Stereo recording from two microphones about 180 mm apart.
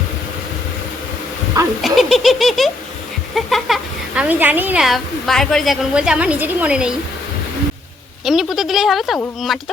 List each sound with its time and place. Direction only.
1.8 s speech: centre (ahead or behind)
8.2 s speech: centre (ahead or behind)